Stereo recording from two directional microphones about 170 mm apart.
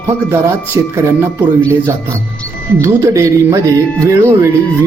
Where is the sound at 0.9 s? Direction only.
15° right (ahead or behind).